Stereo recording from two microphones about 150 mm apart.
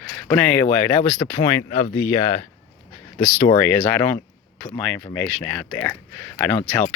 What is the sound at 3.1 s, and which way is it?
Speech, 20° left (ahead or behind).